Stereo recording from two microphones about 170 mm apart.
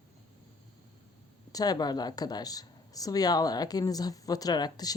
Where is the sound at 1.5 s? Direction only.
20° left (ahead or behind).